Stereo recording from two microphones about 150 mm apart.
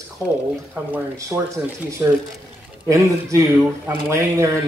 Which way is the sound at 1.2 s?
20° right (ahead or behind).